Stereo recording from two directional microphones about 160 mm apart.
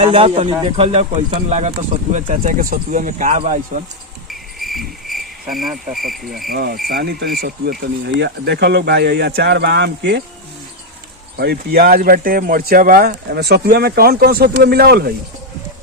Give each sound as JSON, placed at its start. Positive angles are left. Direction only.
{"t": 0.0, "sound": "speech", "side_deg": -35}
{"t": 4.3, "sound": "cricket", "side_deg": 0}
{"t": 5.9, "sound": "insect", "side_deg": 0}
{"t": 6.5, "sound": "speech", "side_deg": -70}
{"t": 11.3, "sound": "speech", "side_deg": -75}